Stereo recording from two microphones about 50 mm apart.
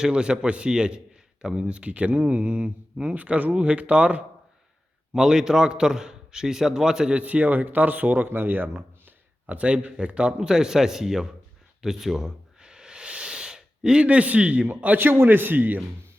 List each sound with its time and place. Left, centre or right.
0.0 s a man's voice: centre
5.1 s a man's voice: centre
7.1 s speech: right
9.6 s a man's voice: right; by 11.3 s centre
11.8 s a sound: centre; by 14.7 s right
14.7 s speech: right
14.9 s speech: right